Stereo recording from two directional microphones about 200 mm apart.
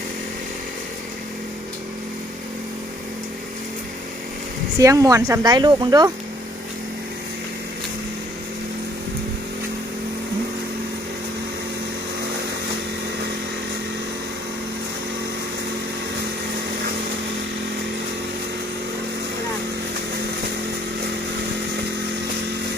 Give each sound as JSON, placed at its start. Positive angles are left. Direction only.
{"t": 4.8, "sound": "speech", "side_deg": -15}